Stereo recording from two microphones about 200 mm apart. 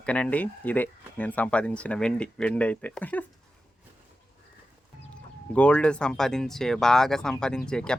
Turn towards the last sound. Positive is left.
turn(degrees=5)  # may be behind; listen again after turning